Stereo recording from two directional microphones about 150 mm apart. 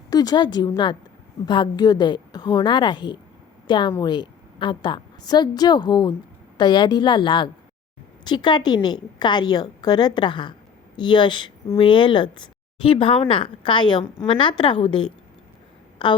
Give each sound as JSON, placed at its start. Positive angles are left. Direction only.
{"t": 0.1, "sound": "a woman's voice", "side_deg": 25}